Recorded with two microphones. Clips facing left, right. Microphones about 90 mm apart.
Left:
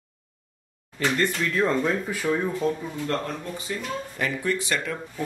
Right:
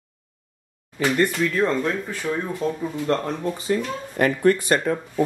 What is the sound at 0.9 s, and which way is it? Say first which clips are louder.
Speech: right 4 dB; 10° right (ahead or behind).